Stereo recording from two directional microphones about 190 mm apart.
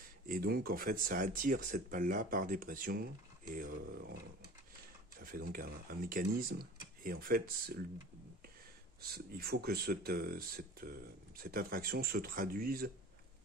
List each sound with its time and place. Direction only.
0.3 s speech: 50° right (ahead or behind)
5.2 s speech: 50° right (ahead or behind)
9.0 s speech: 55° right (ahead or behind)